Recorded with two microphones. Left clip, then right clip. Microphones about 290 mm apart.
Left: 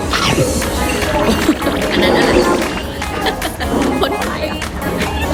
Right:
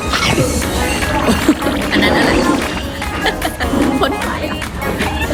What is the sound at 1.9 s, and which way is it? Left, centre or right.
Music, right.